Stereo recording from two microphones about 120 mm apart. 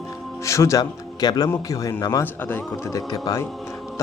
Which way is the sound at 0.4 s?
25° left (ahead or behind).